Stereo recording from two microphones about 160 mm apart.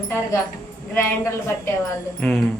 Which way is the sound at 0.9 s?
15° left (ahead or behind).